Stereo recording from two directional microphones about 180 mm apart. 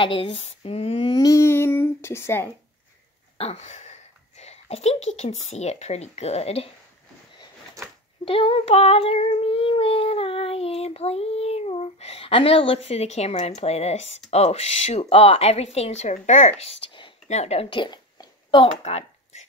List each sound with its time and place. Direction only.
0.0 s female singing: 30° left (ahead or behind); by 2.5 s 15° left (ahead or behind)
3.3 s a sound: 35° left (ahead or behind)
5.5 s a woman's voice: 40° left (ahead or behind)
8.3 s child singing: 30° left (ahead or behind)
14.3 s a woman's voice: 35° left (ahead or behind)